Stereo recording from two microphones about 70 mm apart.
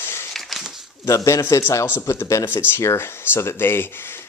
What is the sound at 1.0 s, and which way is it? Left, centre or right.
Speech, left.